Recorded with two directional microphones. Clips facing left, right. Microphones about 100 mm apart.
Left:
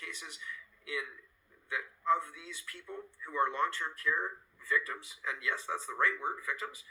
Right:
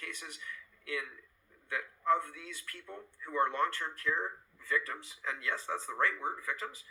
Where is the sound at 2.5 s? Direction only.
40° right (ahead or behind).